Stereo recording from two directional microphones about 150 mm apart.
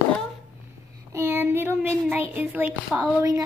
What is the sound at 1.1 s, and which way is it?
A child's voice, 15° right (ahead or behind).